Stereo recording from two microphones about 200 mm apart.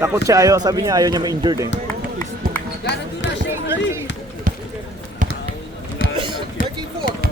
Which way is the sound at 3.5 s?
10° right (ahead or behind).